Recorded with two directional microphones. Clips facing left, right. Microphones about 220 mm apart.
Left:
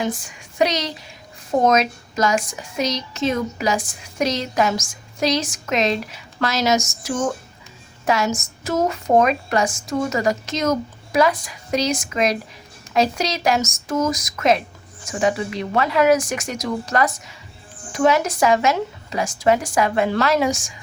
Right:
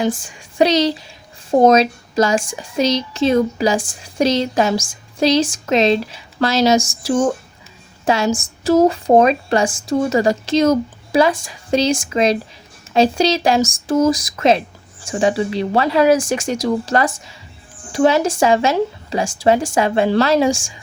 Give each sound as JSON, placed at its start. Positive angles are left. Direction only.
{"t": 0.0, "sound": "speech", "side_deg": -30}